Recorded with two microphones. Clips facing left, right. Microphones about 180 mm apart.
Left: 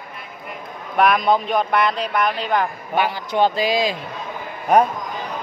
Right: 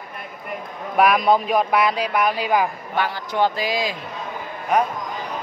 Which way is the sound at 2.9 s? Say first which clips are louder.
Left 3 dB; 20° left (ahead or behind).